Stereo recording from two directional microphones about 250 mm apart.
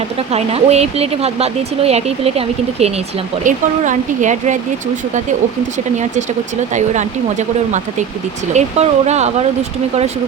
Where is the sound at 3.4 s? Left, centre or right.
Right.